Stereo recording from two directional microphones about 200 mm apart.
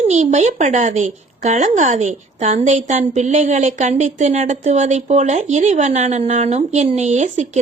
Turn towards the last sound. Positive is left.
turn(degrees=-35)  # may be behind; listen again after turning